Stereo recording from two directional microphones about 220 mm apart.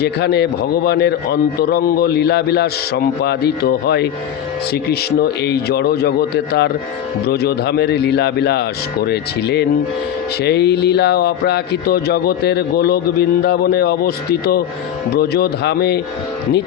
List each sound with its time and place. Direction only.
0.0 s speech: 50° left (ahead or behind)